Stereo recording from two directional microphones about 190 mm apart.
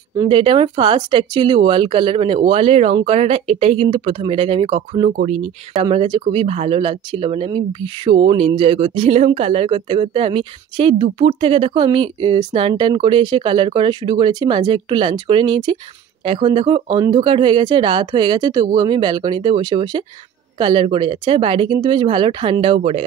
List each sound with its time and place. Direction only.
0.3 s speech: 30° right (ahead or behind)